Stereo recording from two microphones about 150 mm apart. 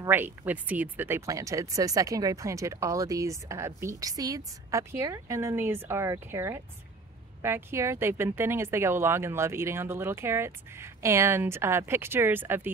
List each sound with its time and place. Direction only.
0.0 s speech: 15° right (ahead or behind)